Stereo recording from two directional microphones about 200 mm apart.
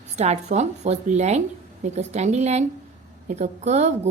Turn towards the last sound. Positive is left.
turn(degrees=-35)  # may be behind; listen again after turning